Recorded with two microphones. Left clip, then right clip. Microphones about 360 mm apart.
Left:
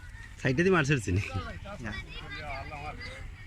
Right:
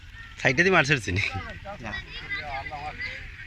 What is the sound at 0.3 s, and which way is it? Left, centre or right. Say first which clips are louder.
A man's voice: right 6 dB; centre.